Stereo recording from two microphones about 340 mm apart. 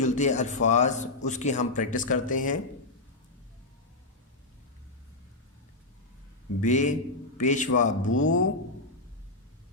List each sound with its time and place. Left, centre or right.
0.0 s a man's voice: left
6.6 s a man's voice: left